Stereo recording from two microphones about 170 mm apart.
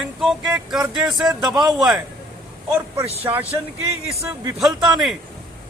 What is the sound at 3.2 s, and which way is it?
Speech, 10° right (ahead or behind).